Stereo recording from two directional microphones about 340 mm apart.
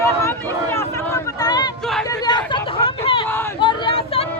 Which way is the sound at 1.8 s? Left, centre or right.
Centre.